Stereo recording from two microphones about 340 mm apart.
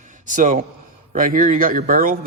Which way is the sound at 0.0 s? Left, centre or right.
Right.